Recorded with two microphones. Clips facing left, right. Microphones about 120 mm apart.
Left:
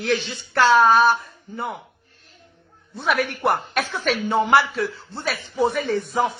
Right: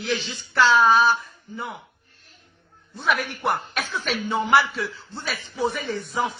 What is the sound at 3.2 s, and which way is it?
Speech, 55° left (ahead or behind).